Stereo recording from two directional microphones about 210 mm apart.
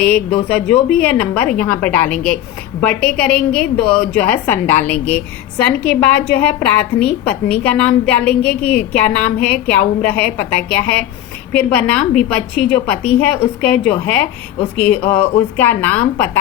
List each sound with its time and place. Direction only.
0.5 s a woman's voice: 5° left (ahead or behind)